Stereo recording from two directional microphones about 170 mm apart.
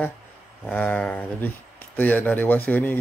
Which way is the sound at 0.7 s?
10° left (ahead or behind).